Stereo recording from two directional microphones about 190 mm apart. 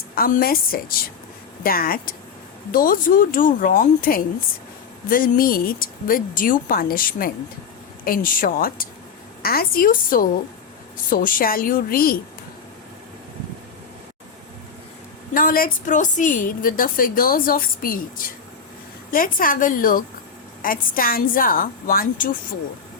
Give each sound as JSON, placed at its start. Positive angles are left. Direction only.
{"t": 0.2, "sound": "a woman's voice", "side_deg": 50}
{"t": 15.3, "sound": "a woman's voice", "side_deg": 45}